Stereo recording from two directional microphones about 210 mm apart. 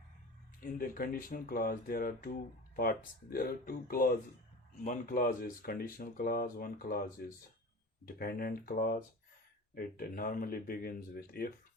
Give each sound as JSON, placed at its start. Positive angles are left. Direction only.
{"t": 0.6, "sound": "speech", "side_deg": 40}